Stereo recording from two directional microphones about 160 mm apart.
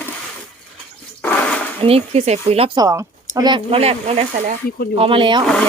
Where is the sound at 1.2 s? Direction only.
10° left (ahead or behind).